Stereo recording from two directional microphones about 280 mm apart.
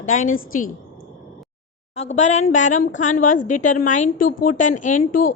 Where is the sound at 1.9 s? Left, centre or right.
Left.